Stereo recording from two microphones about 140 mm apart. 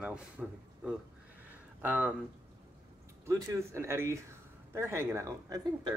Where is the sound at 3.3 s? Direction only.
20° right (ahead or behind).